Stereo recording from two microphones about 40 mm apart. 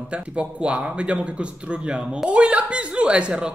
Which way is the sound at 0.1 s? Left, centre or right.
Right.